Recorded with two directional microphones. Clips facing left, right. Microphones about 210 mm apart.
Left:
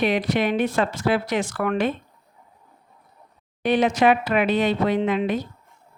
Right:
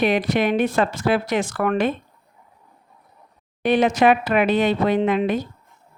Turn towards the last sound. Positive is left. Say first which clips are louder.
# right 2 dB
turn(degrees=-50)  # may be behind; listen again after turning